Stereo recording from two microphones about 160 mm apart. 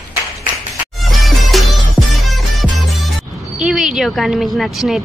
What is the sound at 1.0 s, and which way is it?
Music, centre (ahead or behind).